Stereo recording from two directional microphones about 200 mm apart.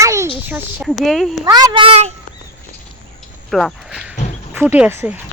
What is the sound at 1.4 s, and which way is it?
Speech, 20° right (ahead or behind).